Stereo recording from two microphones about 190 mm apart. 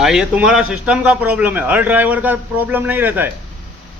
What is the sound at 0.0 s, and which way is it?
A man's voice, 5° right (ahead or behind).